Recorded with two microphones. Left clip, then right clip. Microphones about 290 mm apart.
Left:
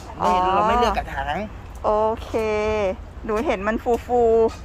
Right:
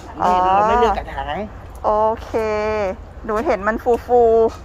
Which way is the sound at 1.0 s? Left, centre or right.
Left.